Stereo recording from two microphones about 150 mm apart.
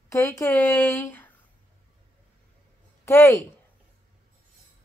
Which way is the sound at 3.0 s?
20° left (ahead or behind).